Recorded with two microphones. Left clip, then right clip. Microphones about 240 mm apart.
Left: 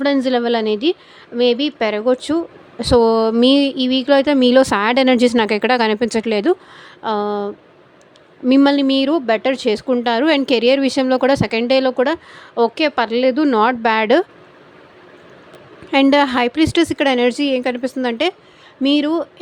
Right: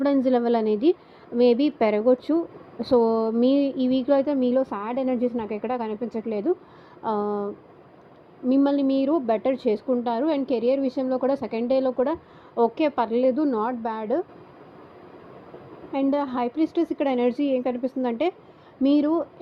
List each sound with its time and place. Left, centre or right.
0.0 s a woman's voice: left
7.0 s a woman's voice: left
8.4 s a woman's voice: left
15.9 s a woman's voice: left